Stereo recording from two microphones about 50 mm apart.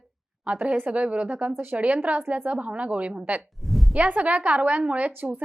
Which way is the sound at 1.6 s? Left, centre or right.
Right.